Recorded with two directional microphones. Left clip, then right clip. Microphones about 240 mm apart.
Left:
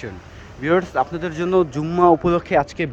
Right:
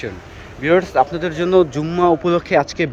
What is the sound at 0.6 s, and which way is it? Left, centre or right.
Speech, centre.